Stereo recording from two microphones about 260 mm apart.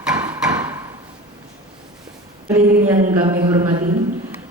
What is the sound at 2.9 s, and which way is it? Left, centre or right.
Speech, right.